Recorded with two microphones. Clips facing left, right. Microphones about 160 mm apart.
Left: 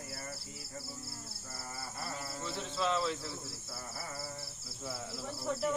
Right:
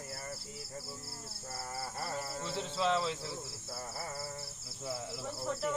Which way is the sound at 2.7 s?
30° right (ahead or behind).